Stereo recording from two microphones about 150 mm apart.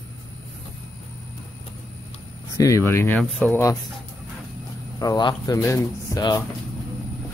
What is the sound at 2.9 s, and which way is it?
Speech, 15° left (ahead or behind).